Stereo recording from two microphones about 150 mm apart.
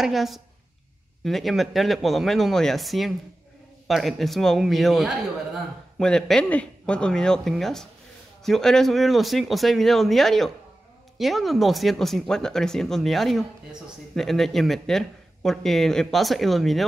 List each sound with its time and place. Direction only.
0.0 s speech: centre (ahead or behind)